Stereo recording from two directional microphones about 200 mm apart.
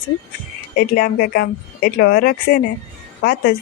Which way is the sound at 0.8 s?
45° left (ahead or behind).